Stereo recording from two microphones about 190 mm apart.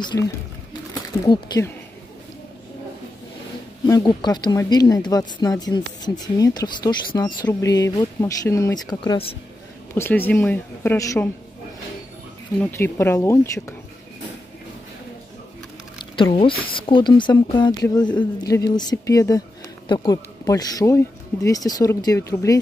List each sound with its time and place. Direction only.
0.1 s speech: 15° left (ahead or behind)
3.8 s speech: 20° left (ahead or behind)
9.9 s speech: 10° left (ahead or behind)
12.5 s speech: 10° left (ahead or behind)
16.2 s speech: 25° left (ahead or behind)